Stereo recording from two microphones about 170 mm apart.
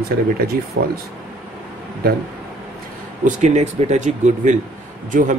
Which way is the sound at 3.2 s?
40° right (ahead or behind).